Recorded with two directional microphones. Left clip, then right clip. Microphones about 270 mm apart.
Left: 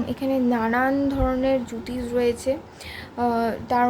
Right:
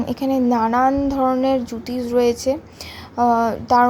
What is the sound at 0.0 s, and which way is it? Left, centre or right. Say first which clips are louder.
A woman's voice: right 4 dB; centre.